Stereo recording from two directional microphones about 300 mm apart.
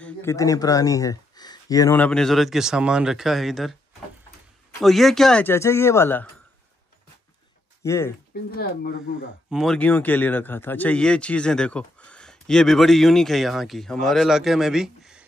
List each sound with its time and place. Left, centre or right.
0.0 s speech: centre
4.8 s speech: centre
7.8 s speech: centre
8.5 s speech: left
9.5 s speech: centre